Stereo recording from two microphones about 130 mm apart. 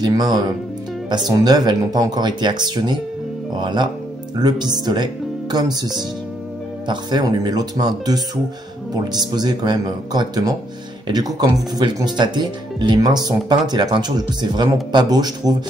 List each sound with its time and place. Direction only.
0.0 s speech: 30° right (ahead or behind)